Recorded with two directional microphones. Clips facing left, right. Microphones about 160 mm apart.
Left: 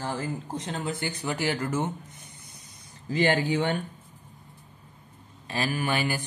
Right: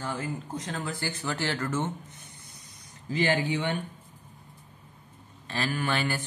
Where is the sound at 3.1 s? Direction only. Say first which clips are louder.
Left 2 dB; 40° left (ahead or behind).